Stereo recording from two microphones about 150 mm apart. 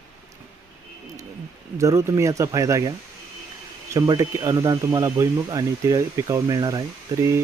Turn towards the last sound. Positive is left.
turn(degrees=-20)  # may be behind; listen again after turning